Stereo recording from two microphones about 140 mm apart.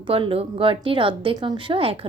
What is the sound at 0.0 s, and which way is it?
A child's voice, 40° right (ahead or behind).